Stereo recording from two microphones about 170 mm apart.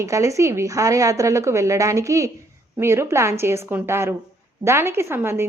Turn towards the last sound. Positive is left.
turn(degrees=-15)  # may be behind; listen again after turning